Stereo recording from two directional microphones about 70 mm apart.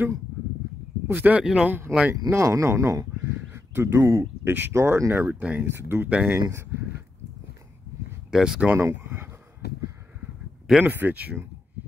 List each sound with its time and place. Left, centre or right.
1.0 s speech: right
1.4 s speech: centre
1.7 s speech: right
2.2 s speech: right
3.3 s a sound: right
4.5 s speech: right
4.7 s speech: right
5.1 s speech: right
6.0 s speech: centre
6.5 s speech: right
8.3 s speech: centre
8.7 s a sound: right
10.8 s speech: right